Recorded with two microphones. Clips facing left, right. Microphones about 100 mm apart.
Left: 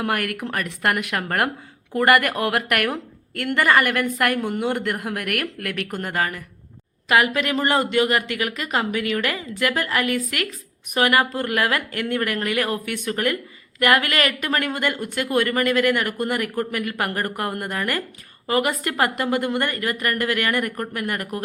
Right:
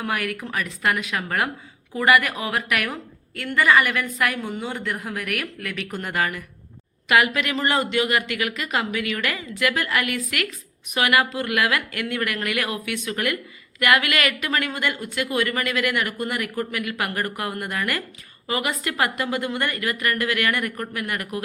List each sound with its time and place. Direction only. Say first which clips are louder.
0.0 s a woman's voice: left 2 dB; 55° left (ahead or behind)
6.0 s speech: right 1 dB; 40° left (ahead or behind)